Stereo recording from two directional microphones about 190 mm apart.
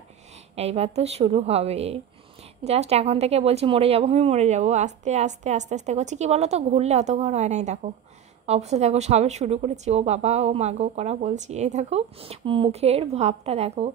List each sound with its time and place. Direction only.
0.6 s a woman's voice: 35° right (ahead or behind)